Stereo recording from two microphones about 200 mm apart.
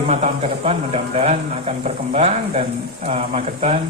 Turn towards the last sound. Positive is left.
turn(degrees=-35)  # may be behind; listen again after turning